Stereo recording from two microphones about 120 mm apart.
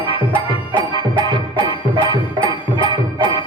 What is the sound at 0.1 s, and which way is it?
Music, 40° right (ahead or behind).